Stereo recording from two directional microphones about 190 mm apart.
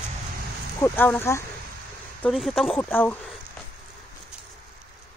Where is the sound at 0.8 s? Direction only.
10° left (ahead or behind).